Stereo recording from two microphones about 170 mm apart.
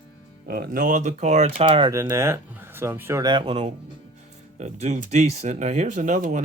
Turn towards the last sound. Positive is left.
turn(degrees=-45)  # may be behind; listen again after turning